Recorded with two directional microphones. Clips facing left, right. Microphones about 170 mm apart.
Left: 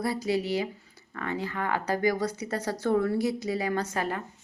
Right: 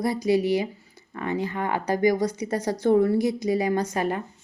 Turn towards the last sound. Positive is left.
turn(degrees=-20)  # may be behind; listen again after turning